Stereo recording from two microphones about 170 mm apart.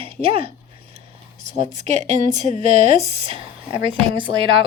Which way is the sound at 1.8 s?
45° right (ahead or behind).